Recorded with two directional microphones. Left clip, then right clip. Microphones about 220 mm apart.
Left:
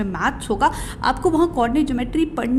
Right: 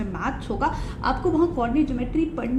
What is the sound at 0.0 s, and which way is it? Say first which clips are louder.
A woman's voice: left 6 dB; 40° left (ahead or behind).